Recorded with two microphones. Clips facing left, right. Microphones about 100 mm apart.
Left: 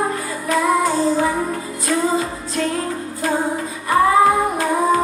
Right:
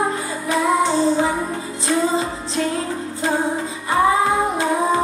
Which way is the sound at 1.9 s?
25° right (ahead or behind).